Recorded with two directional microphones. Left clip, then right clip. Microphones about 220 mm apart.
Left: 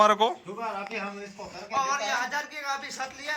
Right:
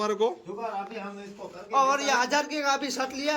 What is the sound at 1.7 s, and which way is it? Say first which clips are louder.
A man's voice: right 4 dB; 40° right (ahead or behind).